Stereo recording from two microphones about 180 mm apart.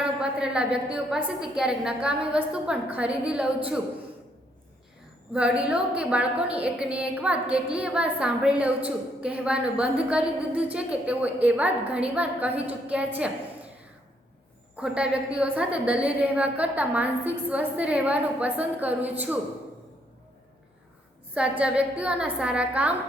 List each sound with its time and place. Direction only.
0.0 s a woman's voice: 5° right (ahead or behind)
5.3 s a woman's voice: 5° right (ahead or behind)
14.8 s a woman's voice: 5° right (ahead or behind)
21.3 s a woman's voice: 5° right (ahead or behind)